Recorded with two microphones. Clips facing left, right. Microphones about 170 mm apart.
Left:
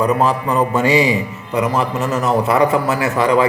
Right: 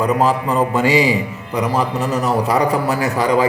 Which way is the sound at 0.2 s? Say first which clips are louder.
Even; 35° right (ahead or behind).